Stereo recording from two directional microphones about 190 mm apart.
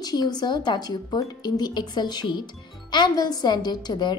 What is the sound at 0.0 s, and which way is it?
A woman's voice, 20° left (ahead or behind).